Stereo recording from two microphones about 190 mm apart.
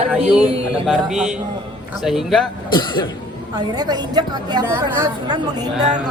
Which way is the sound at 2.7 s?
25° left (ahead or behind).